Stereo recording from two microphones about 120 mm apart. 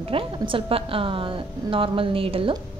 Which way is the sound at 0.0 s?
50° right (ahead or behind).